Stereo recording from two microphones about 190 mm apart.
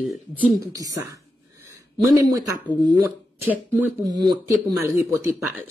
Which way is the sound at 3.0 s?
10° right (ahead or behind).